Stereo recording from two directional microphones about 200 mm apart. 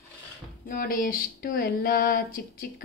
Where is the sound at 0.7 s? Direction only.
45° left (ahead or behind).